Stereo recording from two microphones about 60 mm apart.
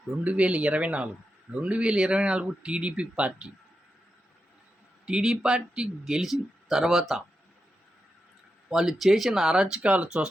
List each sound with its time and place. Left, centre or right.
0.3 s speech: right
5.0 s speech: centre
8.7 s speech: centre